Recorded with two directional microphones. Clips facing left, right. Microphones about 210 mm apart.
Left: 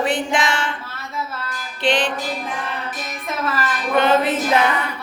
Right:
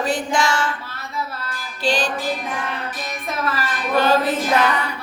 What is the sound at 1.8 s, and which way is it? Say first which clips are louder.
Music: left 2 dB; 20° left (ahead or behind).